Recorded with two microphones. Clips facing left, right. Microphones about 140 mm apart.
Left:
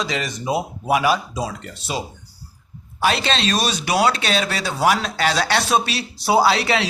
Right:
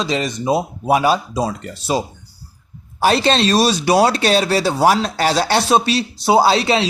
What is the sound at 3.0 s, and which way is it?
Speech, 40° right (ahead or behind).